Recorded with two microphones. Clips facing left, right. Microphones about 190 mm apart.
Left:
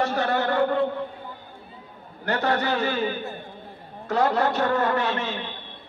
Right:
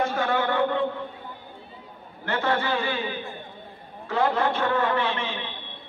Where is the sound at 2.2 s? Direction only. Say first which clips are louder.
Left 2 dB; 40° left (ahead or behind).